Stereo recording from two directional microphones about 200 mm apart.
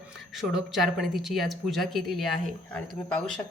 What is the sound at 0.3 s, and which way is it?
Speech, centre (ahead or behind).